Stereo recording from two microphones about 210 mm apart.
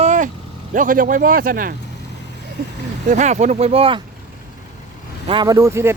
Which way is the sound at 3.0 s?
35° right (ahead or behind).